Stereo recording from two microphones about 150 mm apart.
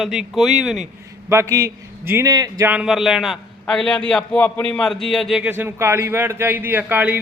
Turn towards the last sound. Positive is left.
turn(degrees=-10)  # may be behind; listen again after turning